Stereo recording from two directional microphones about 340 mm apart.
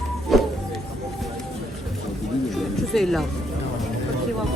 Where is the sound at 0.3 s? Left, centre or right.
Centre.